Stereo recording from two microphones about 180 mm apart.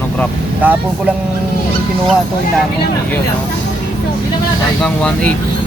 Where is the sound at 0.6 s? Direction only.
10° right (ahead or behind).